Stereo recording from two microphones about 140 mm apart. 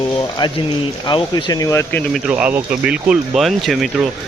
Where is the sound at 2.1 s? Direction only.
5° right (ahead or behind).